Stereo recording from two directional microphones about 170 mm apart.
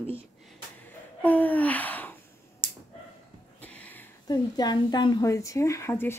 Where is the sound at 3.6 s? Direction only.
10° left (ahead or behind).